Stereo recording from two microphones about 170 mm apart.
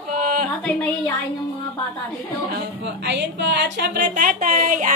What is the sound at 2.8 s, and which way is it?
A woman's voice, 85° right.